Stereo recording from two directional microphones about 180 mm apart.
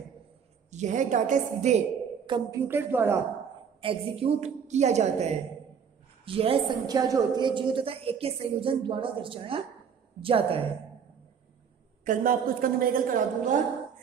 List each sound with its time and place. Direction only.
0.7 s a woman's voice: 40° right (ahead or behind)
2.2 s a woman's voice: 25° right (ahead or behind)
2.6 s speech: 10° right (ahead or behind)
3.8 s a woman's voice: 30° right (ahead or behind)
6.9 s a woman's voice: 20° right (ahead or behind)
12.0 s a woman's voice: 50° right (ahead or behind)